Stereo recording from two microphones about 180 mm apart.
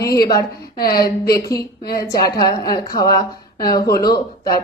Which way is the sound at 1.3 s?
20° left (ahead or behind).